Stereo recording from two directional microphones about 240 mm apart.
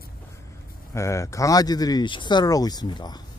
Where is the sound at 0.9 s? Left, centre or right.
Centre.